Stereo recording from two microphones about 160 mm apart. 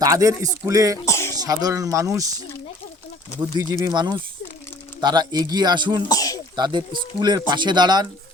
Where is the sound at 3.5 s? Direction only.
25° right (ahead or behind).